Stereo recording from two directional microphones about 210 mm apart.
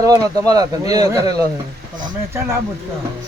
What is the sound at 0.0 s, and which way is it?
Speech, 15° right (ahead or behind).